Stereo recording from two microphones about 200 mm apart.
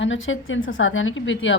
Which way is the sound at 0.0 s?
70° left (ahead or behind).